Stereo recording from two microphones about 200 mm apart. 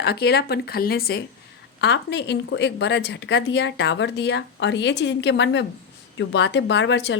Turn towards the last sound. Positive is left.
turn(degrees=65)  # may be behind; listen again after turning